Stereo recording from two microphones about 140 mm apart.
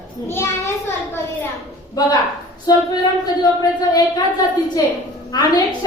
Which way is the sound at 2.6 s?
30° left (ahead or behind).